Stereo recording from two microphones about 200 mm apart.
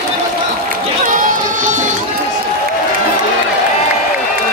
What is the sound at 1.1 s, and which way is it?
Music, 40° right (ahead or behind).